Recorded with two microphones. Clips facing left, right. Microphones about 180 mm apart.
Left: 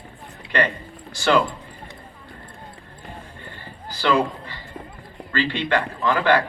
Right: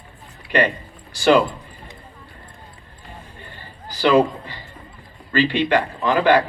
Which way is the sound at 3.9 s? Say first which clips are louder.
Right 5 dB; 15° right (ahead or behind).